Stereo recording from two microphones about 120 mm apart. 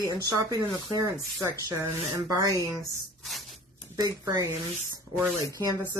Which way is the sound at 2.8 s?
Centre (ahead or behind).